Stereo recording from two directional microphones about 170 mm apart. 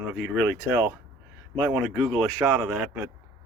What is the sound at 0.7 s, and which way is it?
Speech, 10° right (ahead or behind).